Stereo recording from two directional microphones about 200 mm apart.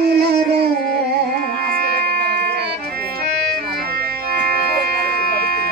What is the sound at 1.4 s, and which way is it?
Music, 50° right (ahead or behind).